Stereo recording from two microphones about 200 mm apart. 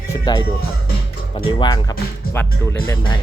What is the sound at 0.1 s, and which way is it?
Music, 20° left (ahead or behind).